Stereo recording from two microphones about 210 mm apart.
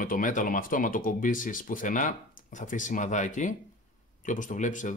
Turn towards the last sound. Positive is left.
turn(degrees=35)  # may be behind; listen again after turning